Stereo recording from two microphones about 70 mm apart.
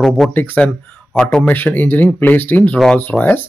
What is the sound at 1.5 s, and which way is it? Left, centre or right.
Speech, left.